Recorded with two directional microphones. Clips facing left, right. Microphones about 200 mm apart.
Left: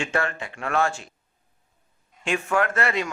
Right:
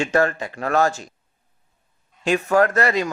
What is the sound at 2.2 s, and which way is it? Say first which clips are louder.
Speech: right 6 dB; 40° right (ahead or behind).